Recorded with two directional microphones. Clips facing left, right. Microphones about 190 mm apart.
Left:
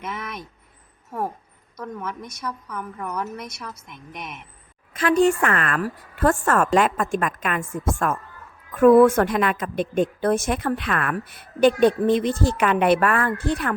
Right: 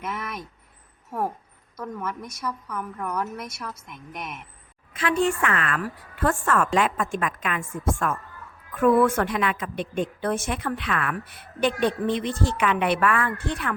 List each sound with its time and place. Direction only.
0.0 s a sound: centre (ahead or behind)
1.8 s a woman's voice: 5° right (ahead or behind)
4.9 s a woman's voice: 40° left (ahead or behind)